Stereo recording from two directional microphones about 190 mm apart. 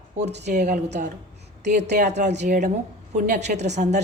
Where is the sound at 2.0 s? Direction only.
35° right (ahead or behind).